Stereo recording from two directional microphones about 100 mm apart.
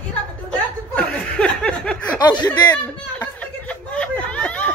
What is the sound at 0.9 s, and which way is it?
Chuckle, 15° left (ahead or behind).